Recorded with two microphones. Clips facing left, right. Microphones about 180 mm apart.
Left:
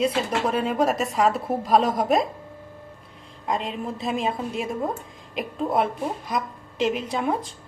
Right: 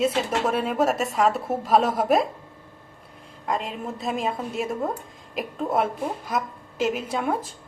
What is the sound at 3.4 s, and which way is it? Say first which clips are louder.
A woman's voice: left 1 dB; centre (ahead or behind).